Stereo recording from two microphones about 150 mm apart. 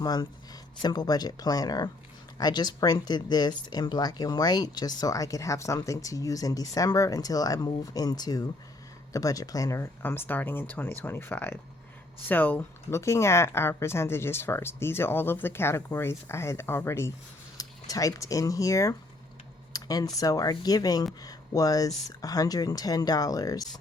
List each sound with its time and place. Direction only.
0.0 s speech: 25° left (ahead or behind)